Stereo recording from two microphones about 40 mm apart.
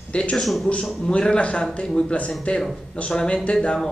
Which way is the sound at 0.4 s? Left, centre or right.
Centre.